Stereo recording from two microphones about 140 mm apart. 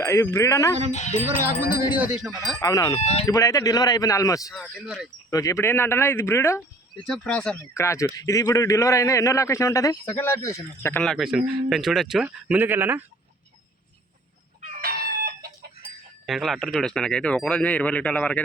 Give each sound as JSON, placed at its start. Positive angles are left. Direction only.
{"t": 0.0, "sound": "a man's voice", "side_deg": 20}
{"t": 0.9, "sound": "music", "side_deg": 60}
{"t": 2.1, "sound": "speech", "side_deg": -5}
{"t": 2.6, "sound": "a man's voice", "side_deg": 25}
{"t": 6.9, "sound": "speech", "side_deg": 5}
{"t": 7.7, "sound": "a man's voice", "side_deg": 20}
{"t": 11.0, "sound": "speech", "side_deg": 0}
{"t": 14.6, "sound": "chicken", "side_deg": -90}
{"t": 16.2, "sound": "speech", "side_deg": 0}